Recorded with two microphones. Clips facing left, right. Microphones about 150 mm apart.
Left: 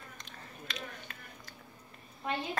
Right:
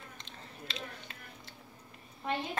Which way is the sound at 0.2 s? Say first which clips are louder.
Even; 25° right (ahead or behind).